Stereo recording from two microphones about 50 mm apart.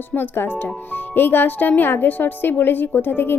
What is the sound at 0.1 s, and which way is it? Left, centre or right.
A woman's voice, left.